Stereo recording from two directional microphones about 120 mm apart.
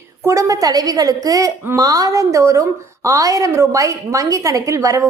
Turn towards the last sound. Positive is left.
turn(degrees=-25)  # may be behind; listen again after turning